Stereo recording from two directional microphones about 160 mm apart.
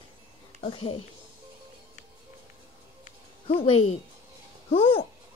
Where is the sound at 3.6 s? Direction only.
35° left (ahead or behind).